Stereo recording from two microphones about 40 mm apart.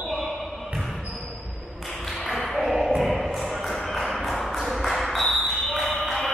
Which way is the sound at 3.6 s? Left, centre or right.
Centre.